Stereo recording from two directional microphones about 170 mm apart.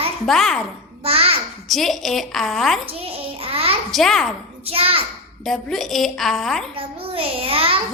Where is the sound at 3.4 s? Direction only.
35° right (ahead or behind).